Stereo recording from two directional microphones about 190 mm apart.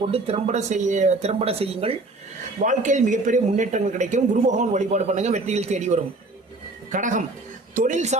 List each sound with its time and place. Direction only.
0.0 s speech: 30° right (ahead or behind)